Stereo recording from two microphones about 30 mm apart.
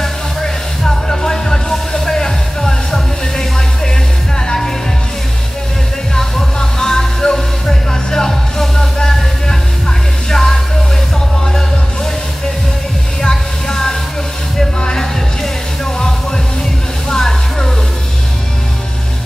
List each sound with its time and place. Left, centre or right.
0.0 s music: centre
6.1 s music: centre
13.2 s music: centre